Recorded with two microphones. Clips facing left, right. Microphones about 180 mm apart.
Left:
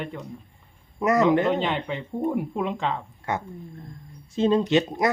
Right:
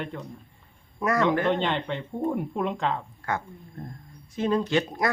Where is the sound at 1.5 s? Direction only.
Centre (ahead or behind).